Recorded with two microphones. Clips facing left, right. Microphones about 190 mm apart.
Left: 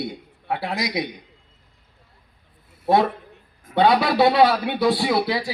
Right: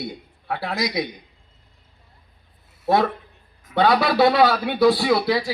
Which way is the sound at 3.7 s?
25° left (ahead or behind).